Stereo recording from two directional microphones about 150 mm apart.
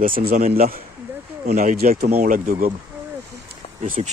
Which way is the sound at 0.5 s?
80° right.